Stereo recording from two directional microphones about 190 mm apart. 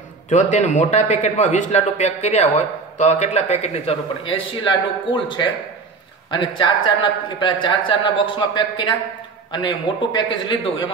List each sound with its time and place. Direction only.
0.3 s a man's voice: 40° left (ahead or behind)